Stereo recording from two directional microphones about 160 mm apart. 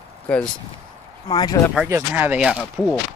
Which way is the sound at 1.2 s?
30° left (ahead or behind).